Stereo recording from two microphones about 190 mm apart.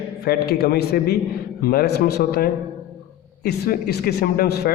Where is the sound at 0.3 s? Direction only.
55° left (ahead or behind).